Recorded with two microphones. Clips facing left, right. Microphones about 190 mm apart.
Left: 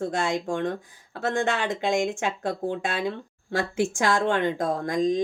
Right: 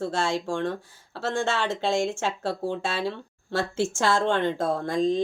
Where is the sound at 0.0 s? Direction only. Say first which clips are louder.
Even; 15° left (ahead or behind).